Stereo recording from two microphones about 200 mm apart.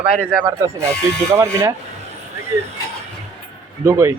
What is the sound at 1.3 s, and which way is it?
Speech, 15° right (ahead or behind).